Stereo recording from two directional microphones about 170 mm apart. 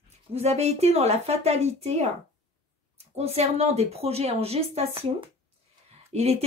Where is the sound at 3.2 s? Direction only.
40° right (ahead or behind).